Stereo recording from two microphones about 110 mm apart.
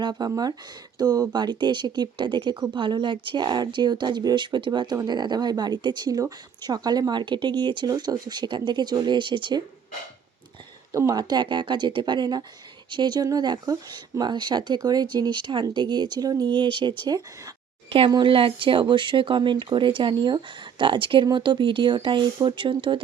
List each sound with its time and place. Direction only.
0.0 s speech: 40° right (ahead or behind)
10.9 s speech: 35° right (ahead or behind)
17.8 s speech: 55° right (ahead or behind)